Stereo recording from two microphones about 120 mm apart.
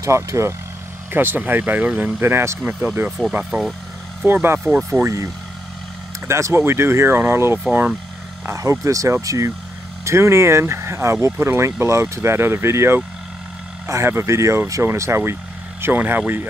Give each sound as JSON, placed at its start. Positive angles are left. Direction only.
{"t": 0.0, "sound": "speech", "side_deg": -25}
{"t": 3.1, "sound": "speech", "side_deg": 0}
{"t": 4.3, "sound": "speech", "side_deg": -15}
{"t": 5.0, "sound": "speech", "side_deg": -25}